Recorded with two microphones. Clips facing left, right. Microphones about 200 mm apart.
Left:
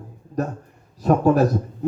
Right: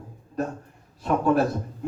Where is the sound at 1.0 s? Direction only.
40° left (ahead or behind).